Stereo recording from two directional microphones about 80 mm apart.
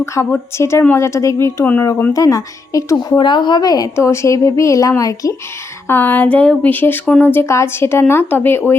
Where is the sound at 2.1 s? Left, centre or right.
Left.